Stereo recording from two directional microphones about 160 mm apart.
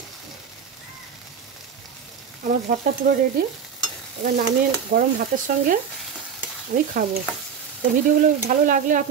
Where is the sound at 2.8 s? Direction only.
70° right (ahead or behind).